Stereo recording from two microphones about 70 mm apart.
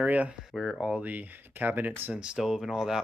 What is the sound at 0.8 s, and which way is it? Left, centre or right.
Speech, right.